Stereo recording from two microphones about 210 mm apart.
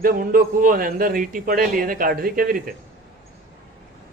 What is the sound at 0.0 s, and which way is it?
A man's voice, 40° right (ahead or behind).